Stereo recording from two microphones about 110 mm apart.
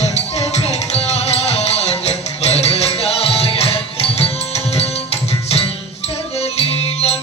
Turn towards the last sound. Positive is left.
turn(degrees=70)  # may be behind; listen again after turning